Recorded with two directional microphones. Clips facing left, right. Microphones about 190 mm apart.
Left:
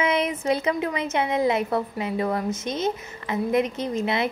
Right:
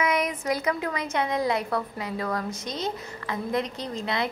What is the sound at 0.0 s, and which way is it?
A woman's voice, 25° left (ahead or behind).